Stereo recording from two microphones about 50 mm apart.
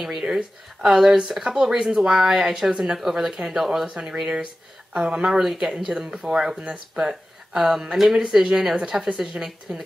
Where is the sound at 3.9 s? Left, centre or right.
Right.